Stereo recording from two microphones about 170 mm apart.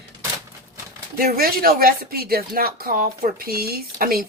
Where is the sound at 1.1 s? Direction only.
60° right (ahead or behind).